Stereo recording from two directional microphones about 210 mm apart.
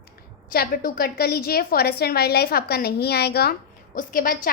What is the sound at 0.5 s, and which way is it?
A woman's voice, 45° left (ahead or behind).